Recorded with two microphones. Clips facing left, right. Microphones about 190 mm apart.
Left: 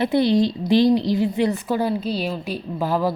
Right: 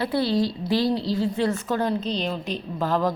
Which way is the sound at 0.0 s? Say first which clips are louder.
Left 5 dB; 20° left (ahead or behind).